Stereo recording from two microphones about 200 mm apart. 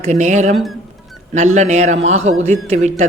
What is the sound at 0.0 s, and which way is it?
Speech, 35° right (ahead or behind).